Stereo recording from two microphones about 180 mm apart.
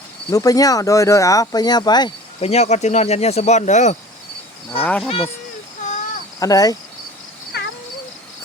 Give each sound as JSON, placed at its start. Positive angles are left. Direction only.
{"t": 0.3, "sound": "speech", "side_deg": 20}
{"t": 2.4, "sound": "speech", "side_deg": 35}
{"t": 4.8, "sound": "speech", "side_deg": 5}
{"t": 5.0, "sound": "speech", "side_deg": 30}
{"t": 6.4, "sound": "speech", "side_deg": 20}
{"t": 7.5, "sound": "cat", "side_deg": 65}